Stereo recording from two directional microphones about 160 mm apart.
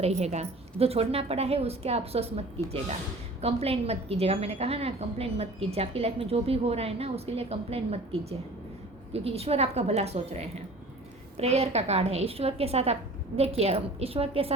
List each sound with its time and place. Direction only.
0.0 s a woman's voice: 45° right (ahead or behind)